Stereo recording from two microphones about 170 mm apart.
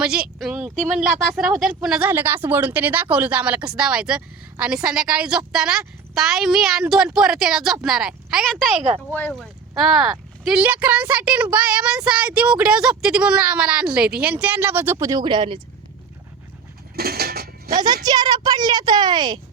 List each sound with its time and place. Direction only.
0.0 s a woman's voice: 5° right (ahead or behind)
0.8 s speech: 45° right (ahead or behind)
1.2 s speech: 5° right (ahead or behind); by 15.6 s 30° right (ahead or behind)
16.9 s goat: 65° right (ahead or behind)
18.0 s speech: 25° right (ahead or behind)